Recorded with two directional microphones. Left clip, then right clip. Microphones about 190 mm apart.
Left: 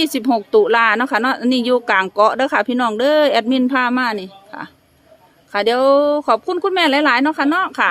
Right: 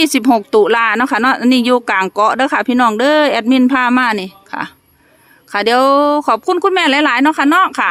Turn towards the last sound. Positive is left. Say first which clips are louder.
# right 5 dB
turn(degrees=-25)  # may be behind; listen again after turning